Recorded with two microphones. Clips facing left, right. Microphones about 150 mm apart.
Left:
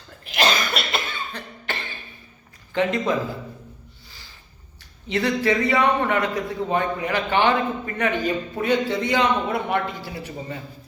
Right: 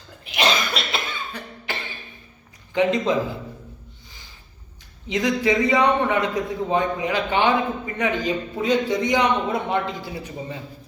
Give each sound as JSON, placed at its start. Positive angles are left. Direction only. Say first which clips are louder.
{"t": 0.3, "sound": "cough", "louder": "even", "side_deg": 0}
{"t": 1.3, "sound": "cough", "louder": "even", "side_deg": -10}
{"t": 2.7, "sound": "a man's voice", "louder": "right 2 dB", "side_deg": -20}
{"t": 5.0, "sound": "a man's voice", "louder": "even", "side_deg": -15}